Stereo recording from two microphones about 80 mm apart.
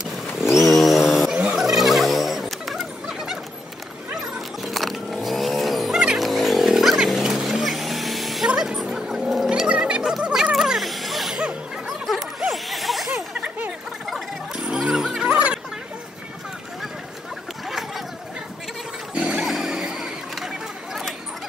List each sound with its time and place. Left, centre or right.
0.0 s vehicle: centre
0.7 s a sound: centre
4.1 s cat: centre
8.5 s music: centre
10.5 s vehicle: centre
14.0 s a sound: centre
14.6 s music: centre
15.3 s chatter: centre
17.6 s a sound: centre
19.1 s music: centre
19.4 s vehicle: centre